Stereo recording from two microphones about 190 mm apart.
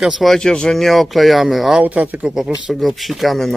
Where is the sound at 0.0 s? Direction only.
Centre (ahead or behind).